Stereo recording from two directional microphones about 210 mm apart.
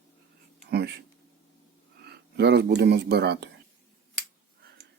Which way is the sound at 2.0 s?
50° right (ahead or behind).